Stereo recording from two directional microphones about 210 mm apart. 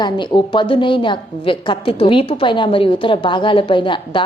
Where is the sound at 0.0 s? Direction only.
20° left (ahead or behind).